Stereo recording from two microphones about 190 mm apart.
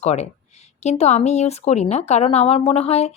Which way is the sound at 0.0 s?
35° left (ahead or behind).